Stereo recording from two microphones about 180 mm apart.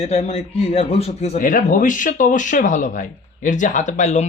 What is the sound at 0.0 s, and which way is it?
A man's voice, 35° left (ahead or behind).